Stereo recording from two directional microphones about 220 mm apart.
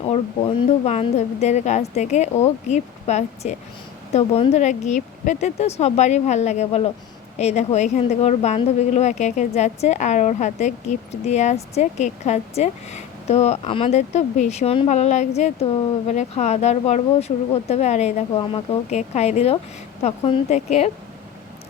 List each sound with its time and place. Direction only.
0.0 s a woman's voice: 30° left (ahead or behind)